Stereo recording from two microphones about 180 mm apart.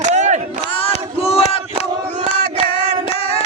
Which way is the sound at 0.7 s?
30° left (ahead or behind).